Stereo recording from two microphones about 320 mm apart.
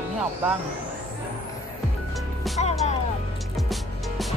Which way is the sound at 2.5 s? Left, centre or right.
Left.